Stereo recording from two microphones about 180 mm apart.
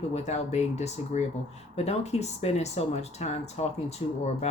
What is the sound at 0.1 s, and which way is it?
Speech, 40° left (ahead or behind).